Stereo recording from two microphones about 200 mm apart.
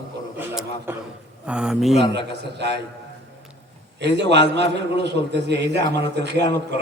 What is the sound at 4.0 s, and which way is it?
A man's voice, 60° right (ahead or behind).